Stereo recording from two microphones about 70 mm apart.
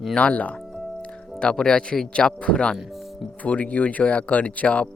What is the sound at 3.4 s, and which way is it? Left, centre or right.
Speech, centre.